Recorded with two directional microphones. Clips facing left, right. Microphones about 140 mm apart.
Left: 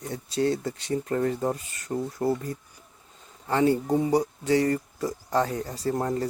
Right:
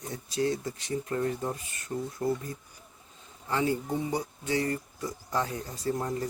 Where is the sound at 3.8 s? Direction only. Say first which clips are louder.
Left 8 dB; 40° left (ahead or behind).